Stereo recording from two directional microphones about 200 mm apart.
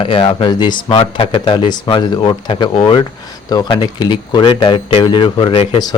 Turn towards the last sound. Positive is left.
turn(degrees=30)  # may be behind; listen again after turning